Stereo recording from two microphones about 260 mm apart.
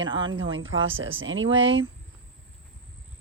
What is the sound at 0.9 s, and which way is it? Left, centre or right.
Speech, right.